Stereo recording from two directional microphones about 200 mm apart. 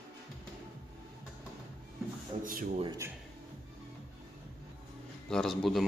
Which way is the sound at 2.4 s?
45° right (ahead or behind).